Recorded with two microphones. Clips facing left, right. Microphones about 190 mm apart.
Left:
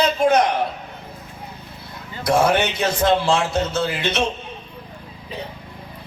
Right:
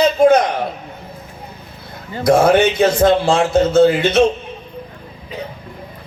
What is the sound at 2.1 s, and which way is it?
A man's voice, 50° right (ahead or behind).